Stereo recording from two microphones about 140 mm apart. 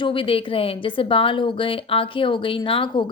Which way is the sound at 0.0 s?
40° left (ahead or behind).